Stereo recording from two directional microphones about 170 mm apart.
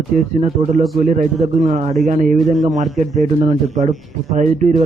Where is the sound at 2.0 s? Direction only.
40° right (ahead or behind).